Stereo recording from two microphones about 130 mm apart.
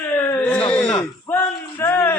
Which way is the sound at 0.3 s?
15° left (ahead or behind).